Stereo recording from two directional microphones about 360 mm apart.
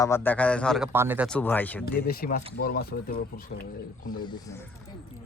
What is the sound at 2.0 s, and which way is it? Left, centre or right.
Speech, left.